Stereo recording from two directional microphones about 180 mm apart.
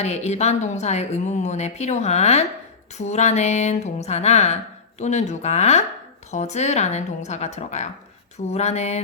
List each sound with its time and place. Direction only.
0.0 s a woman's voice: 40° left (ahead or behind)